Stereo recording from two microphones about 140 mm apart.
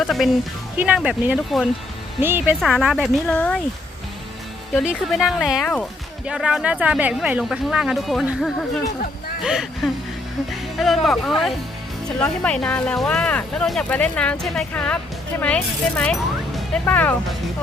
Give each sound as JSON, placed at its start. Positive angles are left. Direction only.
{"t": 0.0, "sound": "speech", "side_deg": 0}
{"t": 2.6, "sound": "speech", "side_deg": 0}
{"t": 3.2, "sound": "speech", "side_deg": 10}
{"t": 4.8, "sound": "speech", "side_deg": -5}